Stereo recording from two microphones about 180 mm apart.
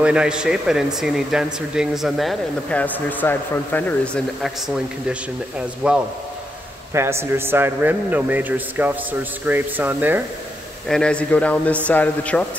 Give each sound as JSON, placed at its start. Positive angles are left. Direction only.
{"t": 0.0, "sound": "a man's voice", "side_deg": -5}
{"t": 10.9, "sound": "speech", "side_deg": 5}